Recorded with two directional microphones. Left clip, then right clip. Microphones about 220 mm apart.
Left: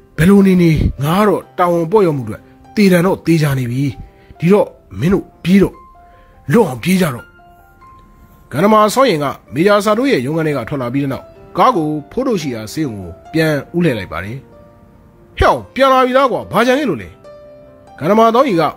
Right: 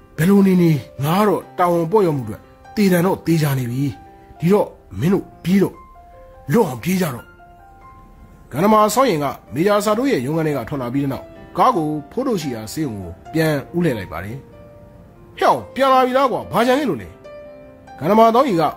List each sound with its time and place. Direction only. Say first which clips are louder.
0.1 s speech: left 5 dB; 15° left (ahead or behind)
8.5 s speech: left 4 dB; 15° left (ahead or behind)